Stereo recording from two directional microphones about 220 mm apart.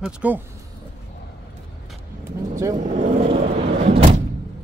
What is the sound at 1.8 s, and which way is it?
Vehicle, centre (ahead or behind).